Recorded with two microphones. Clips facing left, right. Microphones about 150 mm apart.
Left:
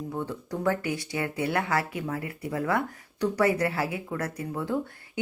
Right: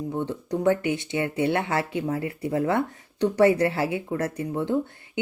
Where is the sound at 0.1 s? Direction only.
25° right (ahead or behind).